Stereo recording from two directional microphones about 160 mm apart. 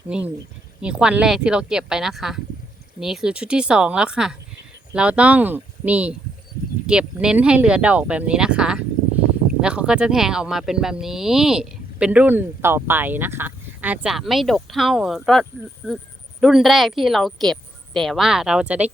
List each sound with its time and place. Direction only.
0.1 s speech: 5° right (ahead or behind)